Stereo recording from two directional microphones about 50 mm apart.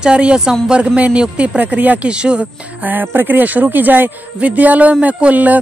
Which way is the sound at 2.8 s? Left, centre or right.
Right.